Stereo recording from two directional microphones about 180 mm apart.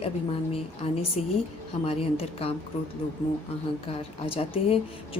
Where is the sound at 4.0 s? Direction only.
30° left (ahead or behind).